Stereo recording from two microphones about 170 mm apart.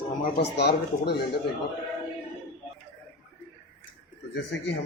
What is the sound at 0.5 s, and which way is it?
Speech, 80° left.